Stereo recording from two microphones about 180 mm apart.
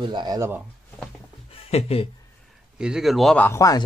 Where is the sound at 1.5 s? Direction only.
35° left (ahead or behind).